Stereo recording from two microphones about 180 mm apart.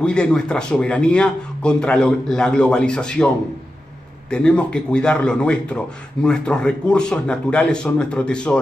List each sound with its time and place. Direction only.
0.0 s a man's voice: 5° left (ahead or behind)
4.3 s a man's voice: 5° left (ahead or behind)